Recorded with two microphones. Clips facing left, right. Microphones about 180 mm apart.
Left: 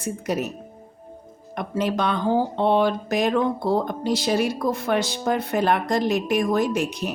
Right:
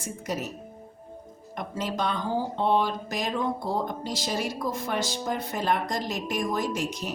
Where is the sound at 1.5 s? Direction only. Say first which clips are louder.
Left 6 dB; 65° left (ahead or behind).